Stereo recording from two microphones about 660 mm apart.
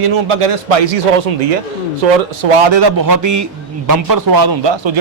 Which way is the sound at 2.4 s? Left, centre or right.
Right.